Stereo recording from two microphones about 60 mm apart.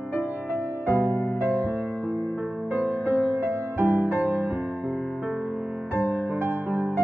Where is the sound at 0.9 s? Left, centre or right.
Left.